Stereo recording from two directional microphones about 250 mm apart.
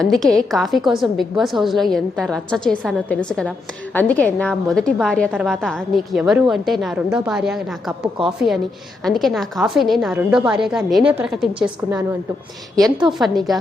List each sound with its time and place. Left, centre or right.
0.0 s a woman's voice: centre
13.1 s a woman's voice: centre